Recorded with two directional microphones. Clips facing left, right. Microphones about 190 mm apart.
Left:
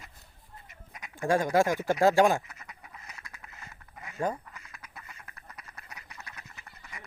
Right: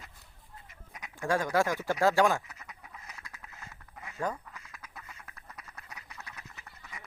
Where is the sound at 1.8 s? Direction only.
15° left (ahead or behind); by 6.6 s centre (ahead or behind).